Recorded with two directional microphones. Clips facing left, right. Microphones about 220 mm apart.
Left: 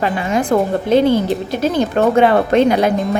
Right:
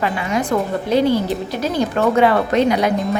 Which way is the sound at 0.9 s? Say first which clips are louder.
Left 3 dB; 25° left (ahead or behind).